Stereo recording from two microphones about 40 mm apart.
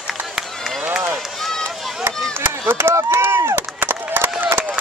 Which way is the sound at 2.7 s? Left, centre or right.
Right.